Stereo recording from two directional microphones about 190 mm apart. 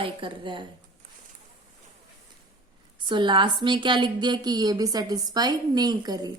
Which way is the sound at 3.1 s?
25° right (ahead or behind).